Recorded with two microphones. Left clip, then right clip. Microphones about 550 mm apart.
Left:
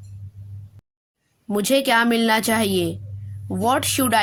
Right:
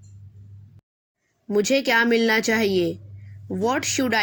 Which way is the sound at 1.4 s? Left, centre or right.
Left.